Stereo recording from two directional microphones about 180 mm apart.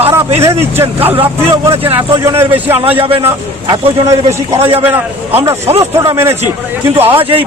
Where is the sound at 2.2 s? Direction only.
15° right (ahead or behind).